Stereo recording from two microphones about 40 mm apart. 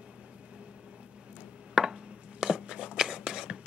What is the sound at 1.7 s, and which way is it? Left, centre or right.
Chopping, centre.